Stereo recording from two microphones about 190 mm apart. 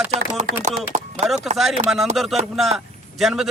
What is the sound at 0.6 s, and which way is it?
Speech, 35° right (ahead or behind).